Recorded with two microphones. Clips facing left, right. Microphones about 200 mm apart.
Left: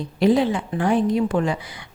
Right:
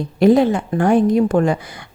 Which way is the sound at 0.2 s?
45° right (ahead or behind).